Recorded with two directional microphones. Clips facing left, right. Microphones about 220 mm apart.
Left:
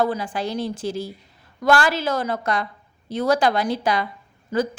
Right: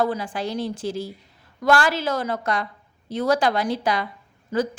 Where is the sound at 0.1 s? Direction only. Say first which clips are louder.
Left 1 dB; 35° left (ahead or behind).